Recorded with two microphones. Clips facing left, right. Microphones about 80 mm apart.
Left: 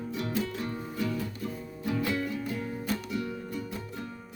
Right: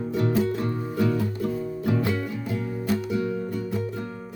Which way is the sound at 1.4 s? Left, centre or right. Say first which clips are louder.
Right 9 dB; right.